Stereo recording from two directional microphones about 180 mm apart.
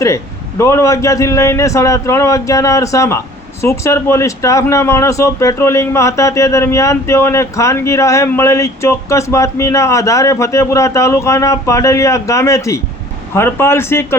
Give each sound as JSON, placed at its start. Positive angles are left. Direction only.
{"t": 0.6, "sound": "speech", "side_deg": 15}